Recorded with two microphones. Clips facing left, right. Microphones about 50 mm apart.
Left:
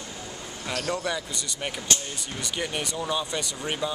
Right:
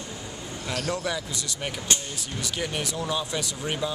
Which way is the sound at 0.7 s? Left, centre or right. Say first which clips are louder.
Even; centre.